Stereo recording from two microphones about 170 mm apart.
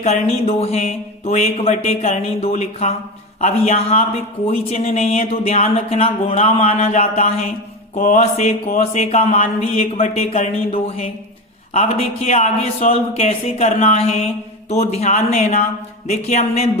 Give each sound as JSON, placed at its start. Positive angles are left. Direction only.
{"t": 0.0, "sound": "speech", "side_deg": 35}
{"t": 7.9, "sound": "mantra", "side_deg": 50}
{"t": 8.9, "sound": "speech", "side_deg": 40}